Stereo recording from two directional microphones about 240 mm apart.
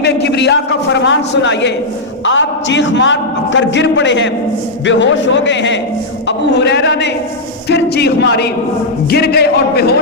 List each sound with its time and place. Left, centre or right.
0.0 s a man's voice: left